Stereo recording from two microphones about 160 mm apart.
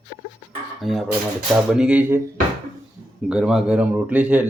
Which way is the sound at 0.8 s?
Centre (ahead or behind).